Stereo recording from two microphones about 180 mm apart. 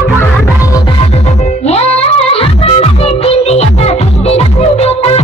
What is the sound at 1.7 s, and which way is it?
Music, 35° left (ahead or behind).